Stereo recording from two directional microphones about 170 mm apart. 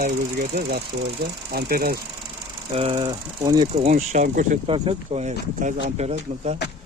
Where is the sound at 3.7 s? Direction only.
40° right (ahead or behind).